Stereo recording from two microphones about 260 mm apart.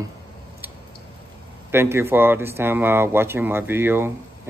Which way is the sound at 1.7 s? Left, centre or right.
Centre.